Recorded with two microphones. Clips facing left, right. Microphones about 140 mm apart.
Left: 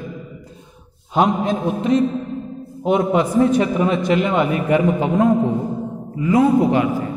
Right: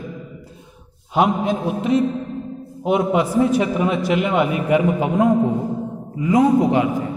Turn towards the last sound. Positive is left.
turn(degrees=-20)  # may be behind; listen again after turning